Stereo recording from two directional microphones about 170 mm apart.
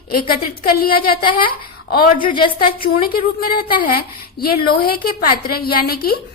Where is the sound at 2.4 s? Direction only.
60° left (ahead or behind).